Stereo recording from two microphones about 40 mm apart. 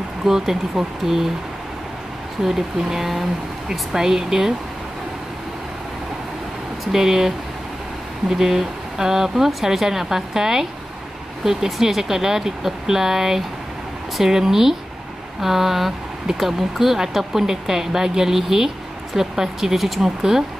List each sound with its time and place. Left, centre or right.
0.2 s speech: centre
2.4 s speech: centre
6.9 s speech: centre